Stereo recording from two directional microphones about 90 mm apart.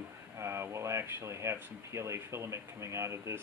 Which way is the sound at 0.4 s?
30° right (ahead or behind).